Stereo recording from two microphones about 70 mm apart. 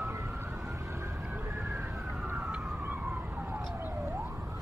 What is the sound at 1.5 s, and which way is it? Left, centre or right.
Emergency vehicle, right.